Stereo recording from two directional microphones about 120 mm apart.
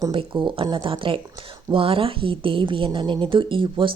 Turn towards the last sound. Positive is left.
turn(degrees=-45)  # may be behind; listen again after turning